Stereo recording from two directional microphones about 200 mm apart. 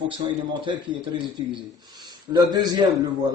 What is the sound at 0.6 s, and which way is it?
A man's voice, 25° right (ahead or behind).